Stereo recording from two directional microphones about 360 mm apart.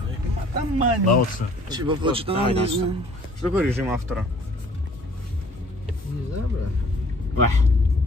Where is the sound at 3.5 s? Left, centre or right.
Centre.